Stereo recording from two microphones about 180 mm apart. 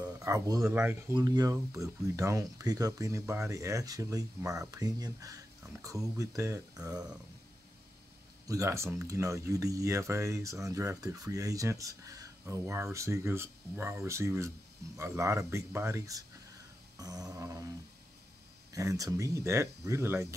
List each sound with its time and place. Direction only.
0.0 s a sound: 20° right (ahead or behind)
0.7 s speech: 10° right (ahead or behind)
1.2 s speech: 20° right (ahead or behind)
8.5 s speech: 15° right (ahead or behind)